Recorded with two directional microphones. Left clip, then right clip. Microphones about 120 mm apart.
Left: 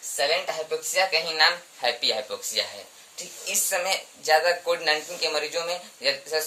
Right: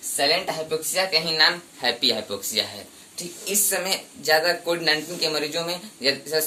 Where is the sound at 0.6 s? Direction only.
30° left (ahead or behind).